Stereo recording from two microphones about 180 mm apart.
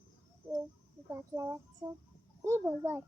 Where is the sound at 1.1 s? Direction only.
15° right (ahead or behind).